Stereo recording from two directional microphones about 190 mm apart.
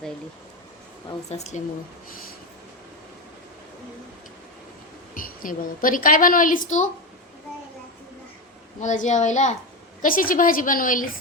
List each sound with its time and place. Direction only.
1.3 s a child's voice: 35° left (ahead or behind)
2.0 s a woman's voice: 50° left (ahead or behind)
5.1 s a woman's voice: 45° left (ahead or behind)
8.8 s a child's voice: 40° left (ahead or behind)